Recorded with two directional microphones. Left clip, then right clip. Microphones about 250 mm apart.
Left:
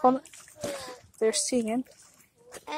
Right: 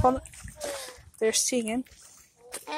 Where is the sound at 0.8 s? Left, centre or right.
Centre.